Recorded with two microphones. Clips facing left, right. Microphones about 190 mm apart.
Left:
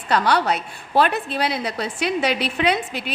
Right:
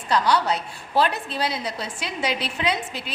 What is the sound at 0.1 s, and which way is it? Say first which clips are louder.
A woman's voice: left 2 dB; 60° left (ahead or behind).